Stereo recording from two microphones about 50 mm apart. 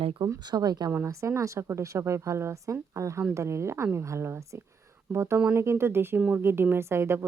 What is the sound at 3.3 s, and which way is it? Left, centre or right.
A woman's voice, right.